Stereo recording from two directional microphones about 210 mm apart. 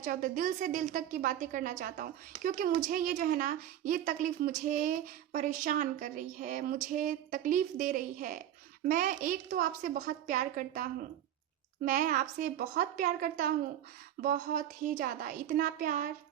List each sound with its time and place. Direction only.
0.0 s a woman's voice: 40° right (ahead or behind)
11.9 s a woman's voice: 40° right (ahead or behind)